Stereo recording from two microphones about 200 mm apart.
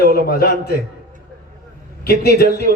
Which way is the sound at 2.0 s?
50° left (ahead or behind).